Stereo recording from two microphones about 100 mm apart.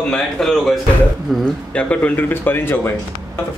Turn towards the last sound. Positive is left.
turn(degrees=25)  # may be behind; listen again after turning